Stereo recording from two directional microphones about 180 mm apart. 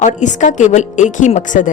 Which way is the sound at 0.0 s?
40° left (ahead or behind).